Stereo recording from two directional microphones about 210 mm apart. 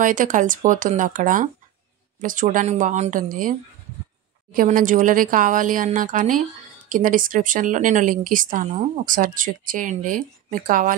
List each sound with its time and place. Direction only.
0.0 s a woman's voice: 40° right (ahead or behind)
4.6 s a woman's voice: 40° right (ahead or behind)